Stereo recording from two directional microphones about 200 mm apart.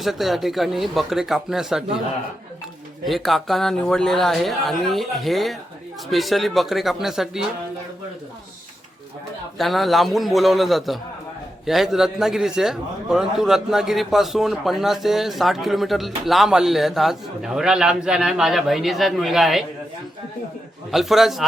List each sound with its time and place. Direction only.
0.0 s a man's voice: centre (ahead or behind)
3.0 s a man's voice: centre (ahead or behind)
9.6 s a man's voice: centre (ahead or behind)
20.9 s a man's voice: centre (ahead or behind)